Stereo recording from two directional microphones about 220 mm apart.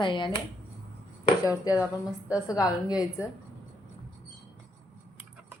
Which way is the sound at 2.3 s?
15° left (ahead or behind).